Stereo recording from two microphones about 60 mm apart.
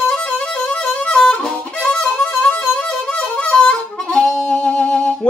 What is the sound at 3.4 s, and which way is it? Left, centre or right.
Harmonica, centre.